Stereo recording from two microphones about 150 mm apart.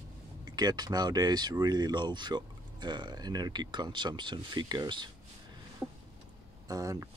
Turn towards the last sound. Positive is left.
turn(degrees=-25)  # may be behind; listen again after turning